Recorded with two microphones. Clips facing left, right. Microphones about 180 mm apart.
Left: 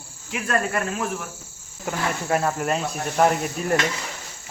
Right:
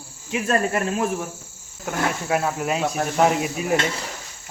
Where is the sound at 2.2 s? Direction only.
Centre (ahead or behind).